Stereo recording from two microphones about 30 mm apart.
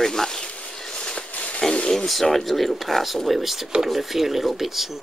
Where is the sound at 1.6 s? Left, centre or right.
Centre.